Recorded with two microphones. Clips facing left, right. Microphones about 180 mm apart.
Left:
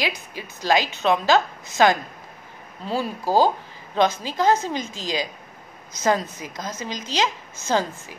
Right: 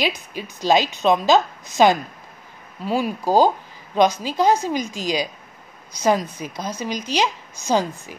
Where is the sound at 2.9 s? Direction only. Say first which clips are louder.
Right 3 dB; 15° right (ahead or behind).